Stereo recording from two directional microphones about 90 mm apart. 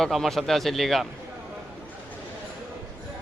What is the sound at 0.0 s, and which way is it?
Speech, centre (ahead or behind).